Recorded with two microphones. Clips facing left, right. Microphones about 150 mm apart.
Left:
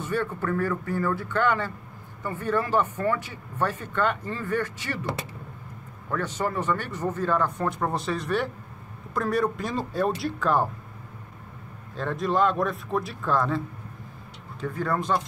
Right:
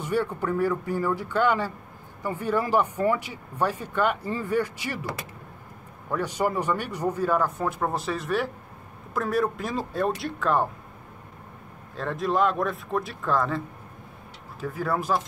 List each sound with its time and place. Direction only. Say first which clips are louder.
0.0 s speech: right 2 dB; 15° right (ahead or behind)
6.0 s speech: right 2 dB; 10° right (ahead or behind)
11.9 s speech: even; centre (ahead or behind)
14.6 s speech: even; 5° right (ahead or behind)